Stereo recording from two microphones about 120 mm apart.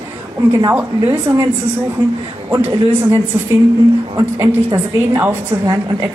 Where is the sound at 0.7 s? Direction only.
15° right (ahead or behind).